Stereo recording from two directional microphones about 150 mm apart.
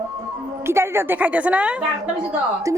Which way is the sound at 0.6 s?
15° right (ahead or behind).